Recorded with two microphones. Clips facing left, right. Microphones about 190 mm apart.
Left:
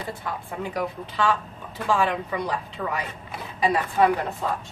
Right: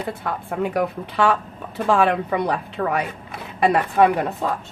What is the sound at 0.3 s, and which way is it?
A woman's voice, 60° right (ahead or behind).